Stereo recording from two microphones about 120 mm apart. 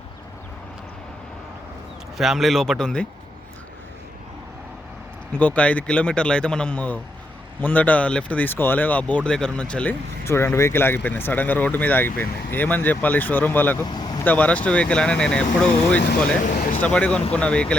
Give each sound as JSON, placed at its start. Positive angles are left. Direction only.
{"t": 2.1, "sound": "speech", "side_deg": 0}
{"t": 5.3, "sound": "speech", "side_deg": 10}
{"t": 10.2, "sound": "speech", "side_deg": 20}
{"t": 13.8, "sound": "vehicle", "side_deg": 35}
{"t": 14.3, "sound": "speech", "side_deg": 10}